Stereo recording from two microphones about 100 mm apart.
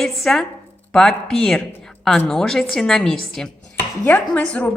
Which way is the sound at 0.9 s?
5° left (ahead or behind).